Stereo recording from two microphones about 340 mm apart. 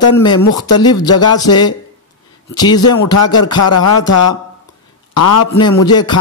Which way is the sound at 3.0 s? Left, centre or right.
Left.